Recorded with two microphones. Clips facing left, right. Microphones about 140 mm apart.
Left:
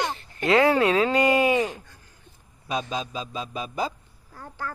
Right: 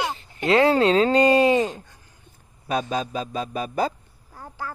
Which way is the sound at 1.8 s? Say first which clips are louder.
Right 3 dB; 20° right (ahead or behind).